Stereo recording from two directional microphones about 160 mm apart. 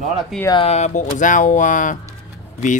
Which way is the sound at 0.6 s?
45° left (ahead or behind).